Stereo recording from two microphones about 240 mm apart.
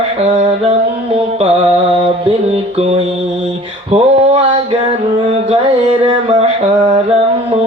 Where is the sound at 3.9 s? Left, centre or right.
Right.